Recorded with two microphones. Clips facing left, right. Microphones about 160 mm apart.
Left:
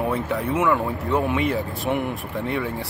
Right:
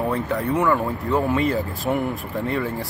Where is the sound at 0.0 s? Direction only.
5° left (ahead or behind).